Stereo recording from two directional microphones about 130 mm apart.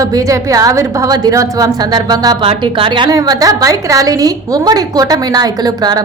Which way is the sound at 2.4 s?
40° right (ahead or behind).